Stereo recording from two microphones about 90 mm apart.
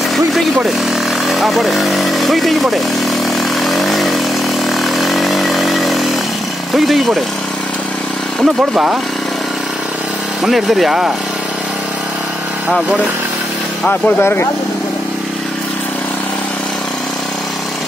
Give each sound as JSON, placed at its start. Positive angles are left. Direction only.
{"t": 1.2, "sound": "speech", "side_deg": 0}
{"t": 3.6, "sound": "vehicle", "side_deg": 0}
{"t": 10.4, "sound": "speech", "side_deg": -5}
{"t": 13.8, "sound": "speech", "side_deg": 20}